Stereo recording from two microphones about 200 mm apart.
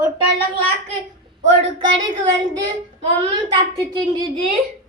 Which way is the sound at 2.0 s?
25° right (ahead or behind).